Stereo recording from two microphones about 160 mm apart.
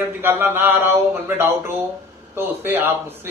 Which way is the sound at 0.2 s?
15° right (ahead or behind).